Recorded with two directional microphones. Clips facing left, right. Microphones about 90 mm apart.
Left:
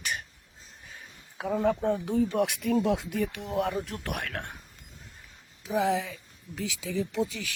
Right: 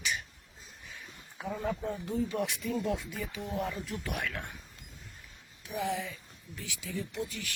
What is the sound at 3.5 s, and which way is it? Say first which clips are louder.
Speech: left 6 dB; 80° left.